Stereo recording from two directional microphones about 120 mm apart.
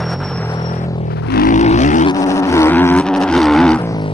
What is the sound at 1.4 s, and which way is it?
Vehicle, 85° left.